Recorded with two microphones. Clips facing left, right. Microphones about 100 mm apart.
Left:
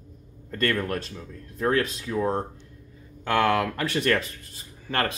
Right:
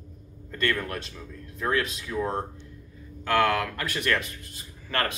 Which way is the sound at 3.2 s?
25° left (ahead or behind).